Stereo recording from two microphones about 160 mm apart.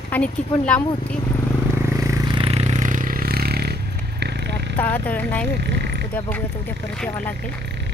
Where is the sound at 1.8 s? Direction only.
20° right (ahead or behind); by 3.7 s 80° right.